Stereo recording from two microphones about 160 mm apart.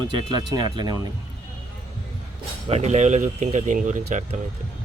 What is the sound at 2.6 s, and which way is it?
Speech, 45° right (ahead or behind).